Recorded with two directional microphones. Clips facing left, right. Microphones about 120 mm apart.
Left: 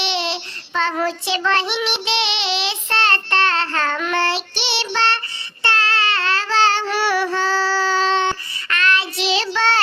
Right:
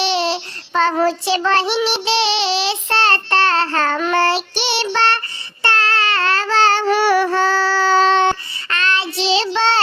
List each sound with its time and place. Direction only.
0.0 s child singing: 40° right (ahead or behind); by 8.4 s 55° right (ahead or behind)
8.7 s child singing: 30° right (ahead or behind)